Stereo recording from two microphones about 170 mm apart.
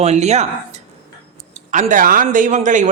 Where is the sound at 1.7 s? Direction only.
50° right (ahead or behind).